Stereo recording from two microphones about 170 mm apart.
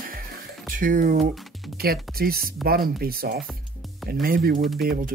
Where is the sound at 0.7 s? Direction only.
50° right (ahead or behind).